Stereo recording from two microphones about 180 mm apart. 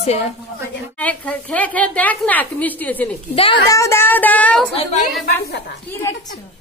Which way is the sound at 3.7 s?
15° left (ahead or behind).